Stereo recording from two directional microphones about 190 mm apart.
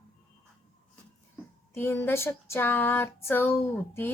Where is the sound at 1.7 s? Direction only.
10° left (ahead or behind).